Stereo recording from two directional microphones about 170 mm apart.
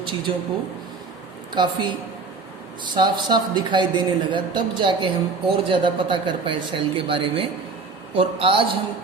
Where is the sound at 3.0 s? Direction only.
25° right (ahead or behind).